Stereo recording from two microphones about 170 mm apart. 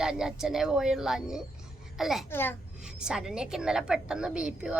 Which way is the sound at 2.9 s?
5° right (ahead or behind).